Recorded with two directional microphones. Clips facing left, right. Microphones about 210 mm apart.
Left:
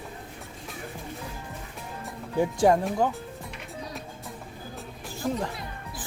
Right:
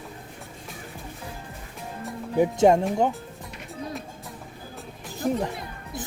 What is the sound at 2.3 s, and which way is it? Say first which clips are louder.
Speech: right 3 dB; 20° right (ahead or behind).